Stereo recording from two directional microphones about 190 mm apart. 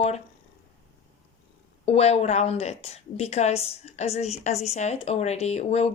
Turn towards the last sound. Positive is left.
turn(degrees=35)  # may be behind; listen again after turning